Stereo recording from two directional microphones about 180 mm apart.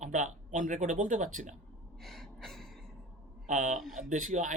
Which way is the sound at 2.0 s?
Centre (ahead or behind).